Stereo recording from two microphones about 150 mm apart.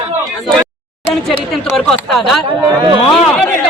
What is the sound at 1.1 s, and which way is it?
Speech, centre (ahead or behind).